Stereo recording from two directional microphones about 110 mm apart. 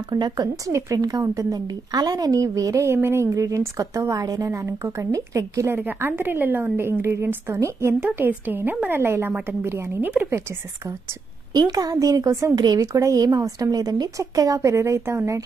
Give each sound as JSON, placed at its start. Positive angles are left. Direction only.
{"t": 0.1, "sound": "a woman's voice", "side_deg": -40}
{"t": 5.8, "sound": "a woman's voice", "side_deg": -20}
{"t": 11.5, "sound": "a woman's voice", "side_deg": -35}